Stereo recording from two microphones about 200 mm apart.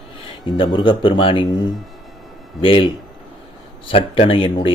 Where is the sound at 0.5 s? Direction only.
25° left (ahead or behind).